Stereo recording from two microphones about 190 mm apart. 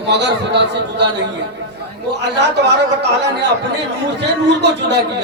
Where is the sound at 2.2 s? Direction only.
65° right (ahead or behind).